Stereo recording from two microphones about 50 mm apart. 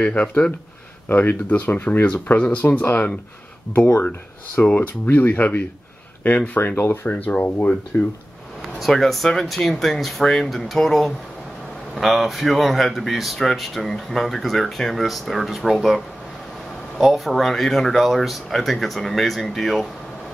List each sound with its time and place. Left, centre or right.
0.0 s speech: left
2.3 s speech: left
4.8 s speech: left
6.8 s speech: left
8.7 s speech: centre
17.0 s speech: centre